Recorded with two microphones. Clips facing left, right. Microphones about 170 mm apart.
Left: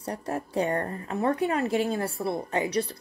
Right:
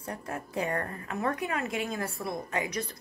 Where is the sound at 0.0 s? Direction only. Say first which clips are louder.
Left 5 dB; 35° left (ahead or behind).